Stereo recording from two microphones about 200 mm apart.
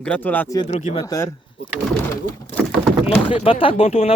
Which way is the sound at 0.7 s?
35° left (ahead or behind).